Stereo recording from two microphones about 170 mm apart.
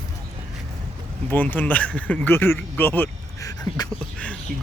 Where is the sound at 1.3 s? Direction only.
10° left (ahead or behind).